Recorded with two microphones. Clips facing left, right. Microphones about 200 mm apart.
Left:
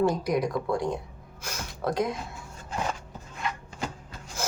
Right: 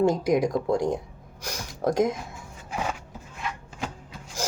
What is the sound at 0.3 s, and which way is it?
Speech, 45° right (ahead or behind).